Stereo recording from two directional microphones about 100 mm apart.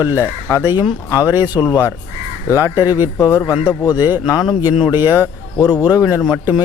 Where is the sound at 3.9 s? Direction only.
40° left (ahead or behind).